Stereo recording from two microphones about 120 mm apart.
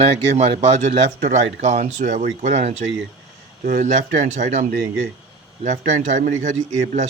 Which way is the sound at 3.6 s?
85° right.